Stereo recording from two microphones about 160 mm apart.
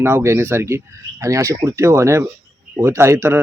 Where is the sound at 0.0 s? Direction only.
15° right (ahead or behind).